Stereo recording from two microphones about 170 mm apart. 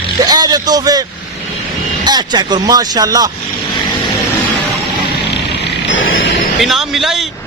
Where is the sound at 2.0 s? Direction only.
25° right (ahead or behind).